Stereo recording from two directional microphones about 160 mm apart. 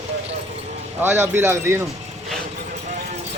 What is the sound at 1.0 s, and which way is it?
Speech, 15° right (ahead or behind).